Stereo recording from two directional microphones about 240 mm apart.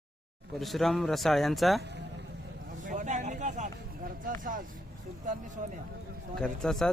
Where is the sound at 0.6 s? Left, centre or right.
Centre.